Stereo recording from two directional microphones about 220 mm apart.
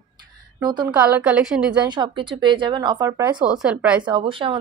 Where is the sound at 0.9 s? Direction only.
5° right (ahead or behind).